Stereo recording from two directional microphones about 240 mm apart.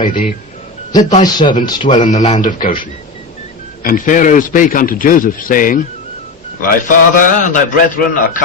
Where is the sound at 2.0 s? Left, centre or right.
Left.